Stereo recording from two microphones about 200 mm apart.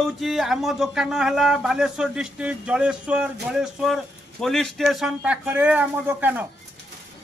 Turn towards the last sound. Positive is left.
turn(degrees=-10)  # may be behind; listen again after turning